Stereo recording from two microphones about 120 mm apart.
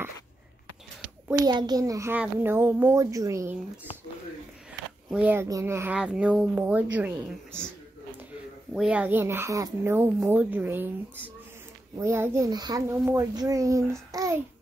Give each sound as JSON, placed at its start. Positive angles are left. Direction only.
{"t": 1.4, "sound": "a child's voice", "side_deg": -35}
{"t": 5.1, "sound": "a child's voice", "side_deg": -15}
{"t": 5.9, "sound": "speech", "side_deg": -10}
{"t": 8.7, "sound": "speech", "side_deg": -10}
{"t": 12.0, "sound": "a child's voice", "side_deg": -25}
{"t": 12.4, "sound": "a child's voice", "side_deg": -35}
{"t": 12.8, "sound": "a child's voice", "side_deg": -25}